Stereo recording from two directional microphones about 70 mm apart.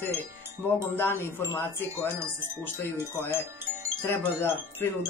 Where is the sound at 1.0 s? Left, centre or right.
Left.